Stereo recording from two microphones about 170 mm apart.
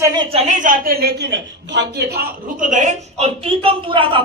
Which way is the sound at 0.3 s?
45° right (ahead or behind).